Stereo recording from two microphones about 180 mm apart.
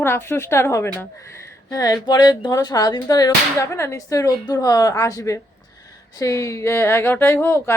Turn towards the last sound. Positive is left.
turn(degrees=15)  # may be behind; listen again after turning